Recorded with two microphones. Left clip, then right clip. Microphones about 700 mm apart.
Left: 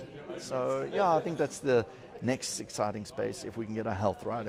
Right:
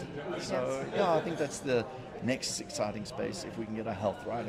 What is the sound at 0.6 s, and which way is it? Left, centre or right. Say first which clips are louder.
Speech: left 4 dB; left.